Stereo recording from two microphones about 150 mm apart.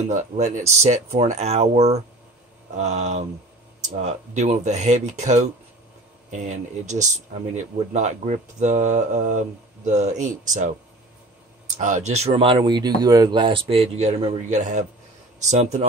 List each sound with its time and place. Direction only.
0.1 s speech: 55° right (ahead or behind)
11.8 s speech: 50° right (ahead or behind)